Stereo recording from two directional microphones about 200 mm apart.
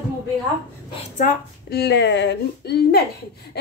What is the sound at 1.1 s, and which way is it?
A woman's voice, 45° left (ahead or behind).